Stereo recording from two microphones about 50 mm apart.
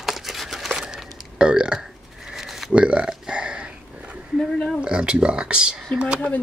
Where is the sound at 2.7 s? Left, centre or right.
Right.